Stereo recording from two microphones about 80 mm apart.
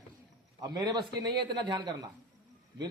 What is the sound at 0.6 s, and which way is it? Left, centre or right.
A man's voice, right.